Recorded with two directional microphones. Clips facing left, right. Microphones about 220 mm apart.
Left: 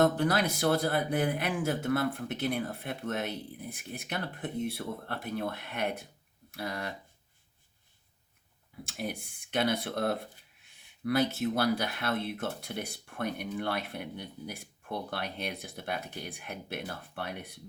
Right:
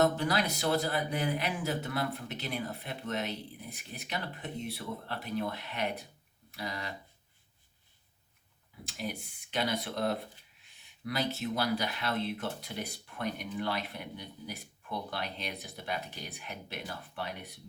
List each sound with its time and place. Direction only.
0.0 s speech: 50° left (ahead or behind)
8.8 s speech: 50° left (ahead or behind)